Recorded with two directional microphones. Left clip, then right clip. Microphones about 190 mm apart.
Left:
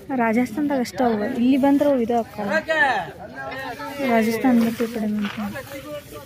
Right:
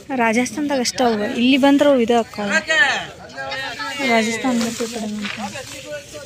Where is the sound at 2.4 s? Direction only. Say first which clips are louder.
Right 2 dB; 40° left (ahead or behind).